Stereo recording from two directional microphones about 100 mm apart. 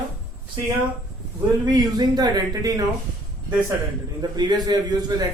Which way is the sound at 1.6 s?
45° right (ahead or behind).